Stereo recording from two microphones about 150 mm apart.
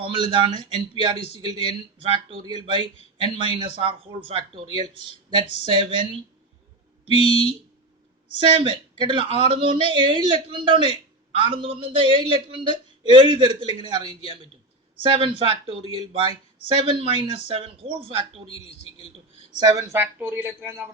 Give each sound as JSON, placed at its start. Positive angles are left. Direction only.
{"t": 0.0, "sound": "a man's voice", "side_deg": -35}
{"t": 7.2, "sound": "a man's voice", "side_deg": 40}
{"t": 8.4, "sound": "a man's voice", "side_deg": -35}
{"t": 18.4, "sound": "a man's voice", "side_deg": 40}
{"t": 19.5, "sound": "speech", "side_deg": -25}